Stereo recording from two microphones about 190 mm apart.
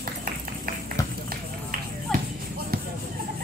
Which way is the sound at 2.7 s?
50° right (ahead or behind).